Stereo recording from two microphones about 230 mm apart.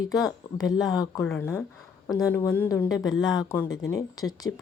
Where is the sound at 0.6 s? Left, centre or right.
Centre.